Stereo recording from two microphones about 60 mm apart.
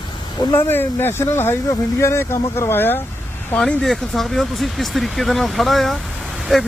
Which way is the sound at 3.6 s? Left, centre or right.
Centre.